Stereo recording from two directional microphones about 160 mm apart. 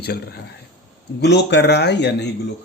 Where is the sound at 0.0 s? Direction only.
80° left.